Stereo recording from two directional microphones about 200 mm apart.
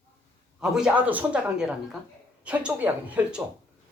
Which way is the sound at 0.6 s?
5° right (ahead or behind).